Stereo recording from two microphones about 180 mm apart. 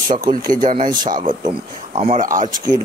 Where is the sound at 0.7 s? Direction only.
50° right (ahead or behind).